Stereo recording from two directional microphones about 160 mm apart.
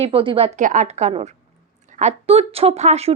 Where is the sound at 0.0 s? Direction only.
35° right (ahead or behind).